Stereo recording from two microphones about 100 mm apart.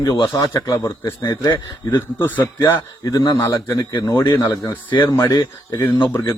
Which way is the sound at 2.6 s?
40° left (ahead or behind).